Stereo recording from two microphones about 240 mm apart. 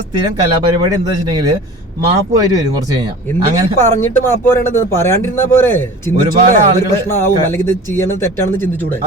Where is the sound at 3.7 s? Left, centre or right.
Centre.